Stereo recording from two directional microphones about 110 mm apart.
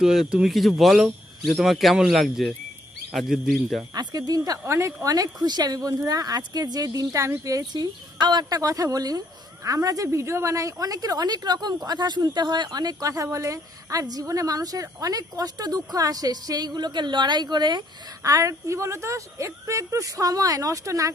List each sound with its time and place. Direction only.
0.0 s speech: 5° right (ahead or behind)
3.9 s speech: 35° right (ahead or behind)